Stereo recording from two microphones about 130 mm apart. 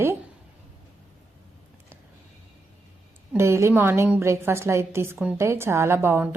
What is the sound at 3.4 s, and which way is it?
A woman's voice, 20° right (ahead or behind).